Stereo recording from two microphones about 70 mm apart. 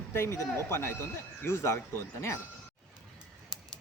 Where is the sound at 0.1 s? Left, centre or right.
Left.